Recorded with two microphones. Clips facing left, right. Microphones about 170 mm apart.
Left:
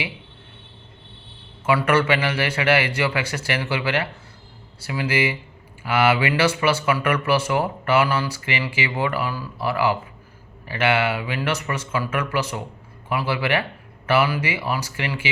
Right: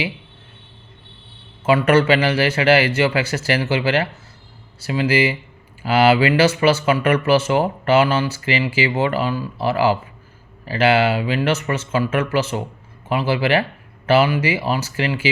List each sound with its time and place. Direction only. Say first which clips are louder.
1.9 s speech: right 6 dB; 30° right (ahead or behind)